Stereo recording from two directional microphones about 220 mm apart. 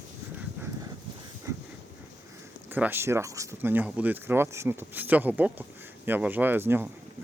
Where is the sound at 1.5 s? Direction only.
15° right (ahead or behind).